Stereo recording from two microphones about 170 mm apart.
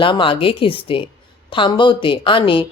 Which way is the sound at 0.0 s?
30° left (ahead or behind).